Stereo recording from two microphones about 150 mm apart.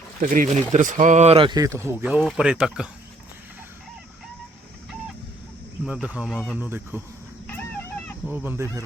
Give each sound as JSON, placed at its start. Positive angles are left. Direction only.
{"t": 0.2, "sound": "speech", "side_deg": -65}
{"t": 1.5, "sound": "speech", "side_deg": -25}
{"t": 2.0, "sound": "speech", "side_deg": -5}
{"t": 5.8, "sound": "speech", "side_deg": -10}
{"t": 8.4, "sound": "speech", "side_deg": -20}